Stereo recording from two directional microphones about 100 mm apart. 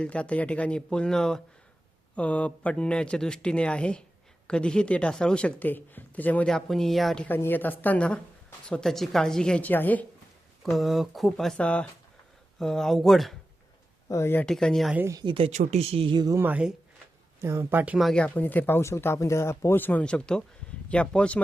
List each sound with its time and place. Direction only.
0.0 s speech: 10° left (ahead or behind)
6.5 s speech: 5° left (ahead or behind)
7.3 s speech: 20° left (ahead or behind)
10.6 s speech: centre (ahead or behind)
14.1 s speech: 30° left (ahead or behind)
14.4 s speech: 5° left (ahead or behind)
15.2 s speech: 55° right (ahead or behind)
15.4 s speech: 90° right; by 16.1 s 75° right (ahead or behind)
16.1 s speech: 40° right (ahead or behind)
16.4 s speech: 15° right (ahead or behind)
17.4 s speech: 25° right (ahead or behind)
18.1 s speech: 15° left (ahead or behind)